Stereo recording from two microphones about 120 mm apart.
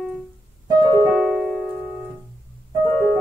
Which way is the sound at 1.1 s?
Centre (ahead or behind).